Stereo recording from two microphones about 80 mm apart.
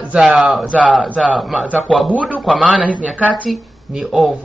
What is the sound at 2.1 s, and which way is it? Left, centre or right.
A man's voice, centre.